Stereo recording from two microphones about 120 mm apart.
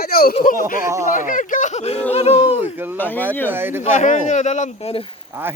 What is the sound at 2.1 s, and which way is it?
Speech, 60° left (ahead or behind).